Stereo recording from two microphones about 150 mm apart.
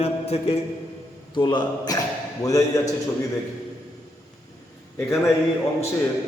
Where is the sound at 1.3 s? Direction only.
30° left (ahead or behind).